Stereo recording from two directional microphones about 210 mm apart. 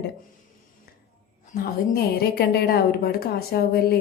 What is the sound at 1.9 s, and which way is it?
A woman's voice, 50° left (ahead or behind).